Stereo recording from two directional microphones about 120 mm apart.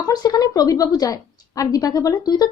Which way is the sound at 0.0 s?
35° left (ahead or behind).